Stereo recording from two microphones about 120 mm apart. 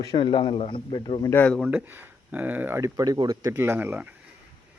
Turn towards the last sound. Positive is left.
turn(degrees=-15)  # may be behind; listen again after turning